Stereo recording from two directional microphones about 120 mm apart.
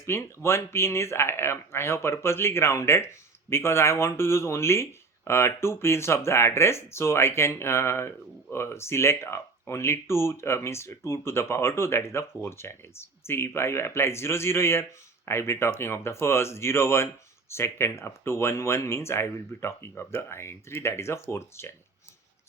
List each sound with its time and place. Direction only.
0.0 s speech: 20° left (ahead or behind)